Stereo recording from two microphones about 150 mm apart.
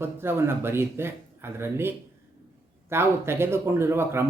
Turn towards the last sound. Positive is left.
turn(degrees=-15)  # may be behind; listen again after turning